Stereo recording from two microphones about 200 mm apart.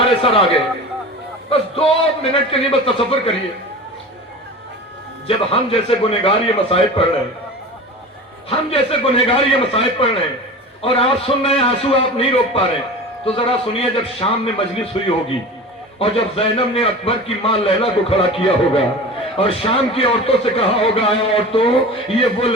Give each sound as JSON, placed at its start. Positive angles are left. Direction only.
{"t": 0.0, "sound": "a sound", "side_deg": 30}
{"t": 1.5, "sound": "a man's voice", "side_deg": 30}
{"t": 5.5, "sound": "a man's voice", "side_deg": 30}
{"t": 8.4, "sound": "a man's voice", "side_deg": 30}